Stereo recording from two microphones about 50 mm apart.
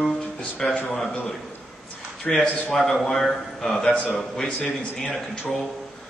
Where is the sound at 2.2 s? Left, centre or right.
Left.